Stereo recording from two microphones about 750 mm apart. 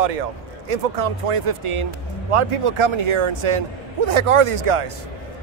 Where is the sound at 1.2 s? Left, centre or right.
Right.